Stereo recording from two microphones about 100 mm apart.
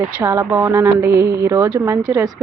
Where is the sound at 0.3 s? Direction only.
30° right (ahead or behind).